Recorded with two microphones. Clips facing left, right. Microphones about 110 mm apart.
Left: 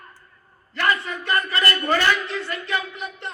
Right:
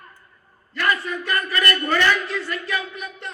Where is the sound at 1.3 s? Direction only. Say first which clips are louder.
Left 1 dB; 25° left (ahead or behind).